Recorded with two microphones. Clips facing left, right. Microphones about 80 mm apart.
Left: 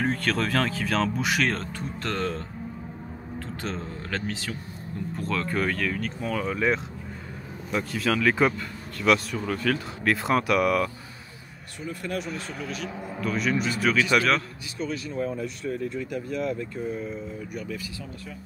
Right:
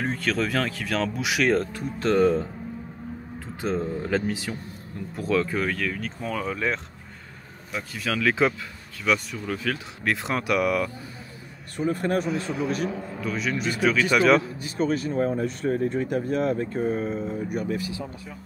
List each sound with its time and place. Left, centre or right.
0.0 s speech: centre
11.8 s speech: right
13.2 s speech: centre
14.8 s speech: right